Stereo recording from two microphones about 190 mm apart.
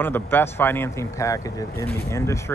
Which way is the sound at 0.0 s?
10° left (ahead or behind).